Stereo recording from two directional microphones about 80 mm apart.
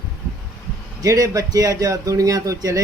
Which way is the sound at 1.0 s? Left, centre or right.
Right.